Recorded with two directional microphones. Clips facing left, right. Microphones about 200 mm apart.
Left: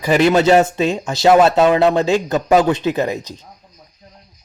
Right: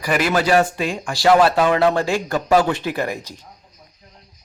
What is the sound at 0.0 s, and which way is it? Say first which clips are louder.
Speech: left 6 dB; 25° left (ahead or behind).